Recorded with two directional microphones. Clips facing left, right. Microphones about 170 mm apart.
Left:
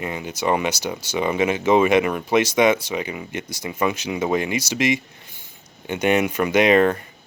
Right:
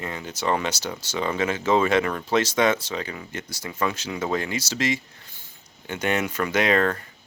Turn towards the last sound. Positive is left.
turn(degrees=15)  # may be behind; listen again after turning